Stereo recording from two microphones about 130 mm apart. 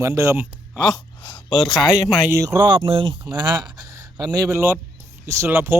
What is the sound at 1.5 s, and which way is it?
Speech, 30° left (ahead or behind).